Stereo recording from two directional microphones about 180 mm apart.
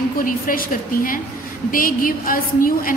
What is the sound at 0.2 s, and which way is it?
A woman's voice, 50° left (ahead or behind).